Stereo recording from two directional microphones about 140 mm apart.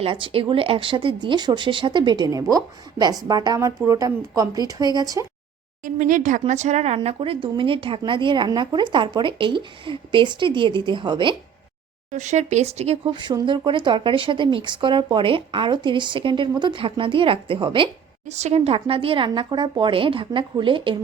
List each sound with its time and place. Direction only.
0.0 s speech: 40° right (ahead or behind)
5.8 s speech: 70° right (ahead or behind)
6.4 s speech: 55° right (ahead or behind); by 11.3 s 35° right (ahead or behind)
12.1 s speech: 55° right (ahead or behind)
13.1 s speech: 35° right (ahead or behind)
18.3 s speech: 50° right (ahead or behind); by 21.0 s 35° right (ahead or behind)